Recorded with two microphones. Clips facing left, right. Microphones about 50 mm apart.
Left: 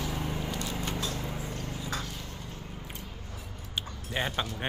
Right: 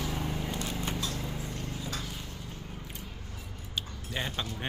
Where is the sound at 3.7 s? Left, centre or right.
Left.